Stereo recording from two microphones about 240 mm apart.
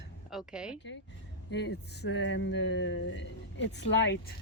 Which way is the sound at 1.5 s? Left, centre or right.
Left.